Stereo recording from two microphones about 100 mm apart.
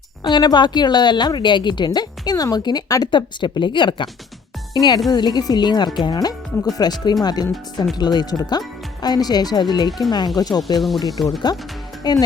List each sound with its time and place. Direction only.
0.3 s a woman's voice: 50° left (ahead or behind)
4.7 s a woman's voice: 40° left (ahead or behind)
10.8 s speech: centre (ahead or behind)
11.5 s a woman's voice: 45° left (ahead or behind)